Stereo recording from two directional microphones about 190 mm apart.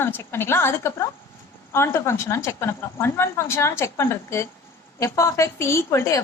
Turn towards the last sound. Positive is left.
turn(degrees=15)  # may be behind; listen again after turning